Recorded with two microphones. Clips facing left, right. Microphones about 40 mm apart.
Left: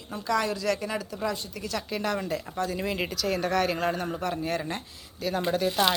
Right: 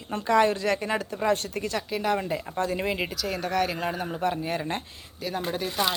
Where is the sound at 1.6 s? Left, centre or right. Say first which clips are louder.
Right 6 dB; right.